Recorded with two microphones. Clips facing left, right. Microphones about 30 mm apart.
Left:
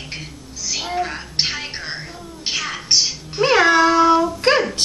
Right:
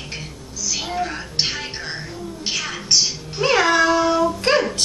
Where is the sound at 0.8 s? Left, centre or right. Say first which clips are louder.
Left 3 dB; centre.